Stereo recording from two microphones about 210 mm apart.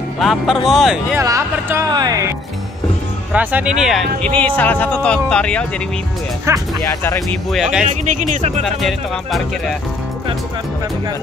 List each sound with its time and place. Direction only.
0.2 s speech: centre (ahead or behind)
1.2 s speech: 15° right (ahead or behind)
3.3 s speech: 5° right (ahead or behind)
6.9 s speech: 10° left (ahead or behind)
7.5 s speech: 5° right (ahead or behind)
7.8 s speech: 35° right (ahead or behind)
8.6 s speech: centre (ahead or behind)